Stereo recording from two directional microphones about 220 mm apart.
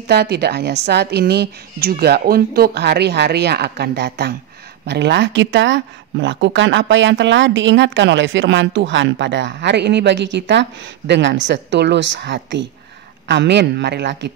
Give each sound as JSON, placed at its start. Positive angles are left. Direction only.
{"t": 0.0, "sound": "a woman's voice", "side_deg": -45}